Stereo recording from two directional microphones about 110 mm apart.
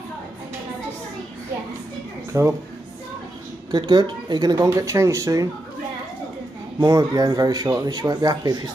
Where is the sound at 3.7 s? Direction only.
40° right (ahead or behind).